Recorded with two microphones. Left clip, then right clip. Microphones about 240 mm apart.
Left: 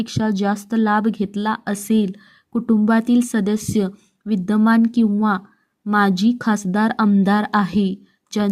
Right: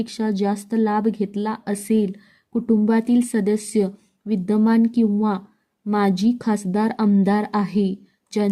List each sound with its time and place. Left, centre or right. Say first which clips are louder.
0.0 s a woman's voice: left 2 dB; centre